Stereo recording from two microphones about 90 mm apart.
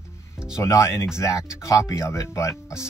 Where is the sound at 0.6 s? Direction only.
35° left (ahead or behind).